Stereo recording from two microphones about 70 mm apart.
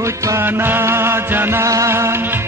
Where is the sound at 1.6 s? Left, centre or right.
Right.